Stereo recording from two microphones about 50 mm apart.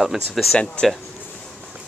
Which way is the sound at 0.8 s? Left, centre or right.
Left.